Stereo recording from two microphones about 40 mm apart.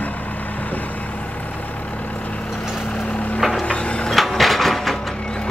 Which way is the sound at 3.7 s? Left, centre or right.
Left.